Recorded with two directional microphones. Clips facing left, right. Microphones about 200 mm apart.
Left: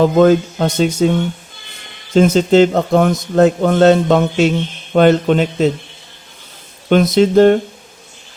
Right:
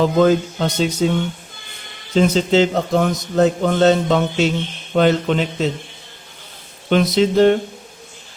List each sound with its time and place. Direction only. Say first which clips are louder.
0.0 s a man's voice: left 4 dB; 50° left (ahead or behind)
2.1 s a man's voice: left 5 dB; 50° left (ahead or behind)
6.9 s a man's voice: left 4 dB; 50° left (ahead or behind)